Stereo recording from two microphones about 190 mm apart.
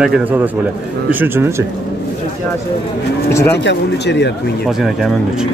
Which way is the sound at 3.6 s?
65° left (ahead or behind).